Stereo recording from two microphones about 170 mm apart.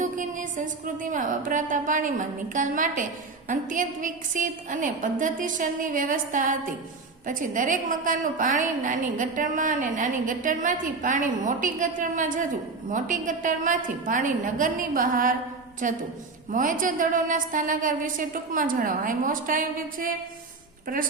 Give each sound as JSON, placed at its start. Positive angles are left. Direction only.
{"t": 0.0, "sound": "a woman's voice", "side_deg": -50}